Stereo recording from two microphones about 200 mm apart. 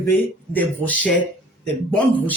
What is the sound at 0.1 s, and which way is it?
Speech, 10° left (ahead or behind).